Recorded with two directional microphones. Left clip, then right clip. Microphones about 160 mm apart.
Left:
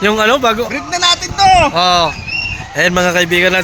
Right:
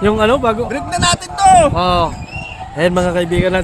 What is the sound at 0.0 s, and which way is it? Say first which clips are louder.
Speech: left 2 dB; 15° right (ahead or behind).